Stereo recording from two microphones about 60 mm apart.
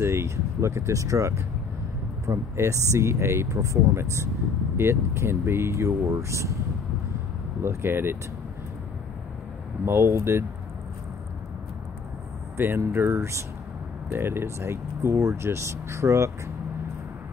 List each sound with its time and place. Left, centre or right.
0.0 s speech: right
2.5 s speech: right
7.6 s speech: right
9.8 s speech: right
12.5 s speech: right